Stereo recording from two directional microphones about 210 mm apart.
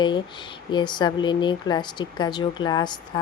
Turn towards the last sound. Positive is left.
turn(degrees=20)  # may be behind; listen again after turning